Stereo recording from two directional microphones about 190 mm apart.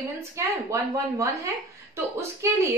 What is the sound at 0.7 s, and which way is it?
A woman's voice, 15° right (ahead or behind).